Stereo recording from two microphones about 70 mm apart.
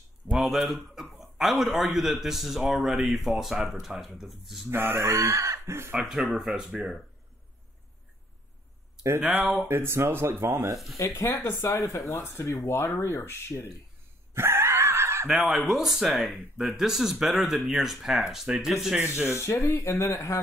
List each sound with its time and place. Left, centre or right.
0.3 s speech: centre
4.6 s speech: right
5.9 s speech: centre
9.7 s speech: right
11.0 s speech: left
12.6 s speech: left
14.3 s screaming: right
15.2 s speech: centre
19.2 s speech: left